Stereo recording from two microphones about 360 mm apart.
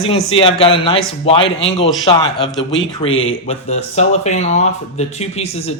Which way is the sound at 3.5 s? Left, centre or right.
Centre.